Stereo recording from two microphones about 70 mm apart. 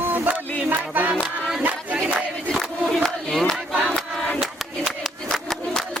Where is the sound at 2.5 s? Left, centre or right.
Centre.